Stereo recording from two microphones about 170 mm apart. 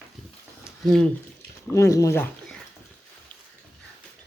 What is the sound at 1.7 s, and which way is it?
Speech, 20° left (ahead or behind).